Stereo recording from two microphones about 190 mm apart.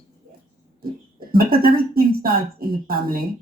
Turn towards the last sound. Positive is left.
turn(degrees=-50)  # may be behind; listen again after turning